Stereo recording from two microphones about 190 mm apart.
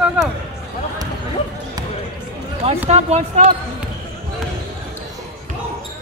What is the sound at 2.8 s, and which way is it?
Speech, 35° right (ahead or behind).